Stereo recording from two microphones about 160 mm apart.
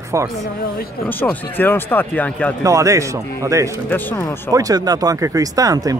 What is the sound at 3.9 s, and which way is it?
Speech, 10° left (ahead or behind).